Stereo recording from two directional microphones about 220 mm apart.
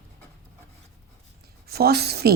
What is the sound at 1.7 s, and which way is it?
Speech, 45° right (ahead or behind).